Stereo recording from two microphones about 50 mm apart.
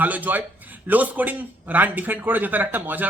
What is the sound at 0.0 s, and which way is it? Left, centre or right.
A man's voice, right.